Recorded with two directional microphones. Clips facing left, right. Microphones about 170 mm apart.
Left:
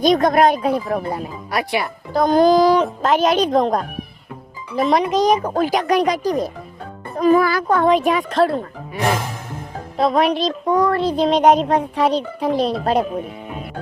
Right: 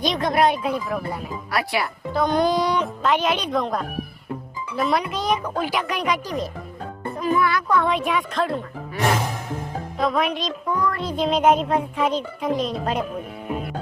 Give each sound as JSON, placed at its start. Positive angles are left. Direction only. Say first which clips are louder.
{"t": 0.0, "sound": "speech", "louder": "left 6 dB", "side_deg": 45}
{"t": 1.5, "sound": "speech", "louder": "left 3 dB", "side_deg": 20}
{"t": 2.1, "sound": "a child's voice", "louder": "left 7 dB", "side_deg": 40}
{"t": 4.8, "sound": "a child's voice", "louder": "left 7 dB", "side_deg": 40}
{"t": 10.0, "sound": "a child's voice", "louder": "left 6 dB", "side_deg": 35}